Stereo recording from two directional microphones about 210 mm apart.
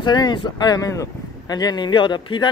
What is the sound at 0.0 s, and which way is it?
Speech, 20° left (ahead or behind).